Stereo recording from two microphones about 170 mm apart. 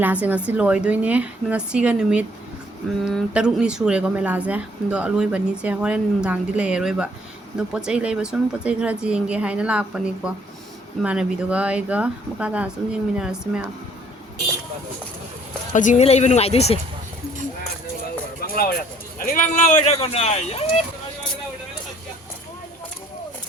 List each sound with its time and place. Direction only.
0.0 s a woman's voice: 10° right (ahead or behind)
15.7 s speech: 45° left (ahead or behind)
18.5 s speech: 60° left (ahead or behind); by 20.7 s 40° left (ahead or behind)